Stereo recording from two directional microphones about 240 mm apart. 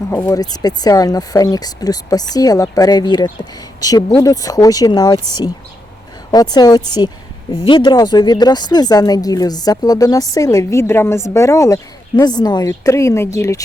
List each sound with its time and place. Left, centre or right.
0.1 s speech: centre